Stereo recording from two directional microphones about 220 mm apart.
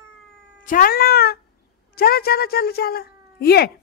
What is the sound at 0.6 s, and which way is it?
Speech, 40° left (ahead or behind).